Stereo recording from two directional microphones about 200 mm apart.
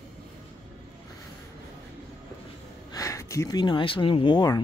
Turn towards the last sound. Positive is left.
turn(degrees=20)  # may be behind; listen again after turning